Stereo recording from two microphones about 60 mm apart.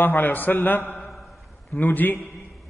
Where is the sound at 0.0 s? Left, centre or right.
Left.